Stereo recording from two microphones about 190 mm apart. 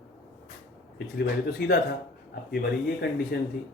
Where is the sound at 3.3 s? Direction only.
60° left (ahead or behind).